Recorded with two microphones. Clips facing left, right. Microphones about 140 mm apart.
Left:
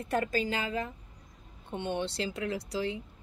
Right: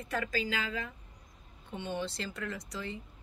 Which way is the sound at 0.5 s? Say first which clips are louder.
Left 3 dB; 30° left (ahead or behind).